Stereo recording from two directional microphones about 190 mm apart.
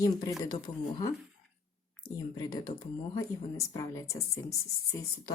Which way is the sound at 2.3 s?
20° left (ahead or behind).